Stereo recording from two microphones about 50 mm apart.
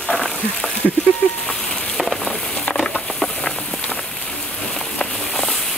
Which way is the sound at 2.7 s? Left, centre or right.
Centre.